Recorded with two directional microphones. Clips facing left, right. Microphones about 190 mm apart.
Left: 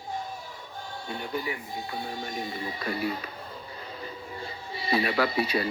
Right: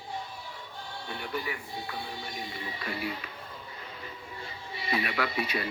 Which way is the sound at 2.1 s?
45° left (ahead or behind).